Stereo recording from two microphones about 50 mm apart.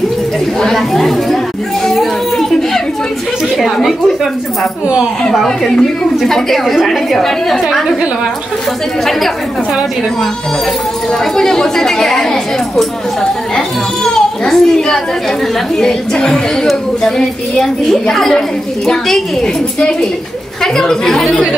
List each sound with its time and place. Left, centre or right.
0.6 s a woman's voice: centre
1.9 s a sound: centre
3.5 s a woman's voice: centre
5.3 s a woman's voice: centre
11.1 s a woman's voice: centre
18.1 s a woman's voice: centre